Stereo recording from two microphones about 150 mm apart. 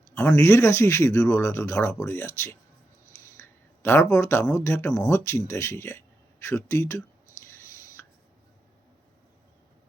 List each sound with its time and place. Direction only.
0.3 s speech: 20° left (ahead or behind)